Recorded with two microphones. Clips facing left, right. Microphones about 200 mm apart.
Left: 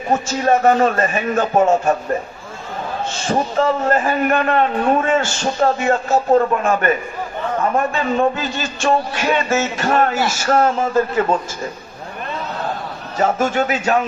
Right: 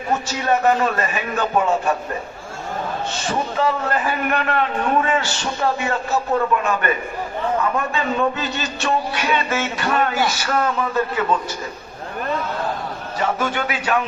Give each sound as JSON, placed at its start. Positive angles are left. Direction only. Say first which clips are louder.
{"t": 0.1, "sound": "a man's voice", "louder": "left 4 dB", "side_deg": 45}
{"t": 3.1, "sound": "a man's voice", "louder": "left 7 dB", "side_deg": 45}
{"t": 13.1, "sound": "a man's voice", "louder": "left 5 dB", "side_deg": 45}